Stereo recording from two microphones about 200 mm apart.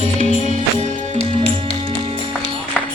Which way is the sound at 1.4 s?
25° right (ahead or behind).